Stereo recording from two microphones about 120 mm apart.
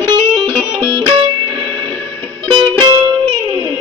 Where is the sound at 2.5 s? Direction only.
35° right (ahead or behind).